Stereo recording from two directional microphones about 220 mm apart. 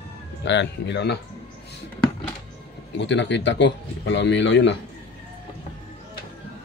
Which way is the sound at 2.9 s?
55° left (ahead or behind).